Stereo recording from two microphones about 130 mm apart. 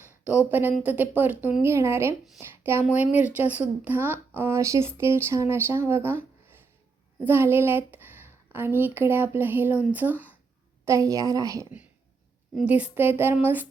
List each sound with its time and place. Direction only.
0.3 s a woman's voice: 15° right (ahead or behind)
10.8 s a woman's voice: 25° right (ahead or behind)
12.6 s speech: 10° right (ahead or behind)